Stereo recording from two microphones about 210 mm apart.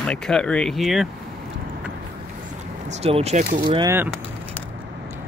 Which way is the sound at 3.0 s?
30° right (ahead or behind).